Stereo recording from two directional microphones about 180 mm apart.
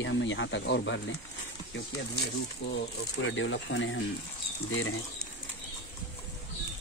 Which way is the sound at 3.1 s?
90° left.